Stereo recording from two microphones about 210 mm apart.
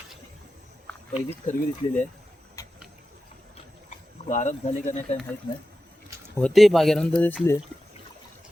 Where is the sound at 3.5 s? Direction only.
30° left (ahead or behind).